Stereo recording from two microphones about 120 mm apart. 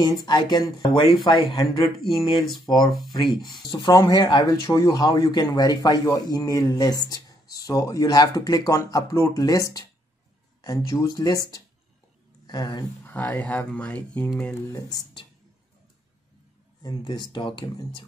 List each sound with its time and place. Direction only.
0.0 s speech: 35° left (ahead or behind)
13.0 s speech: 10° left (ahead or behind)
14.7 s speech: 30° left (ahead or behind)
16.8 s speech: 40° left (ahead or behind)